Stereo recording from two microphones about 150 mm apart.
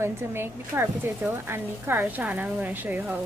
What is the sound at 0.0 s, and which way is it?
A woman's voice, 15° right (ahead or behind).